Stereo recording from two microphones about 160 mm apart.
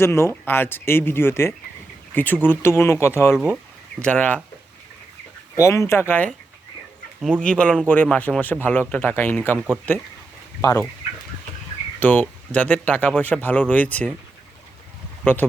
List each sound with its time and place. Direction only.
0.0 s speech: 15° left (ahead or behind)
3.3 s speech: 5° right (ahead or behind)
4.0 s speech: 10° left (ahead or behind)
5.5 s speech: 15° left (ahead or behind)
7.2 s speech: centre (ahead or behind)
10.6 s speech: 20° left (ahead or behind)
12.0 s speech: 10° left (ahead or behind)
15.2 s speech: 10° left (ahead or behind)